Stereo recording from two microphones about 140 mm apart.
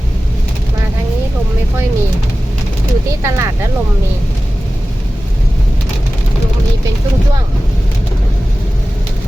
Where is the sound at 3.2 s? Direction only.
20° right (ahead or behind).